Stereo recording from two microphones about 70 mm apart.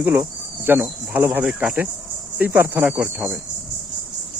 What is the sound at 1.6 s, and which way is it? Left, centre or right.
Speech, centre.